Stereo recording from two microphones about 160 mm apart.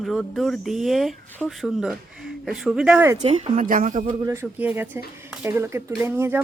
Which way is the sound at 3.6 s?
55° right (ahead or behind).